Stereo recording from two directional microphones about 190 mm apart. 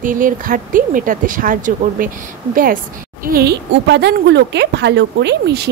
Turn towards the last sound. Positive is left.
turn(degrees=-60)  # may be behind; listen again after turning